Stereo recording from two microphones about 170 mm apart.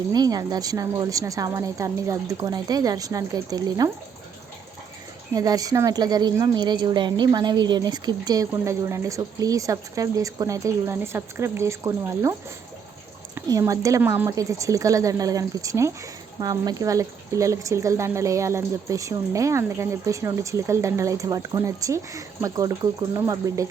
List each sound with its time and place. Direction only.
0.1 s speech: 25° right (ahead or behind)
5.3 s speech: 20° right (ahead or behind)